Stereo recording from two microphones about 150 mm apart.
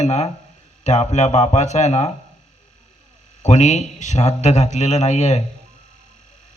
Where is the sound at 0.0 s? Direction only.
50° left (ahead or behind).